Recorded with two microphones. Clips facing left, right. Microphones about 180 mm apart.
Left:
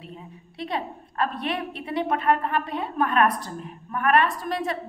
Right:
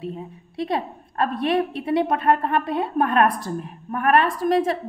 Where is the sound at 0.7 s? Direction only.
45° right (ahead or behind).